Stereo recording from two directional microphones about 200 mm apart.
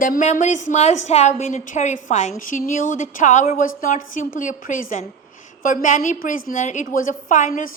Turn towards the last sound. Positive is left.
turn(degrees=40)  # may be behind; listen again after turning